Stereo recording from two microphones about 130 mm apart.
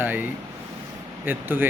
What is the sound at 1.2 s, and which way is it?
Speech, 15° right (ahead or behind).